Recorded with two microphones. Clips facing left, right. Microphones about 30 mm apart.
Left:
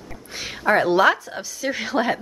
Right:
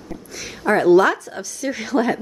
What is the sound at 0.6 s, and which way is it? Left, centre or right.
Speech, centre.